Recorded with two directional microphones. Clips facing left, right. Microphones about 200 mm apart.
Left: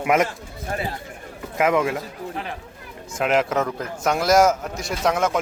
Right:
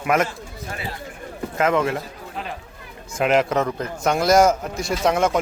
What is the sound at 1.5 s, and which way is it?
Speech, 10° left (ahead or behind).